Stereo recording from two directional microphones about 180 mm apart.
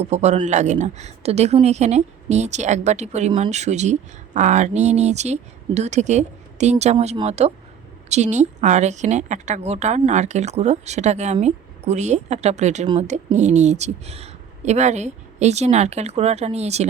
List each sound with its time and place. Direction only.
0.0 s a woman's voice: 40° right (ahead or behind)